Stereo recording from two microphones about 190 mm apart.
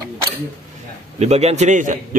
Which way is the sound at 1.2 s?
35° right (ahead or behind).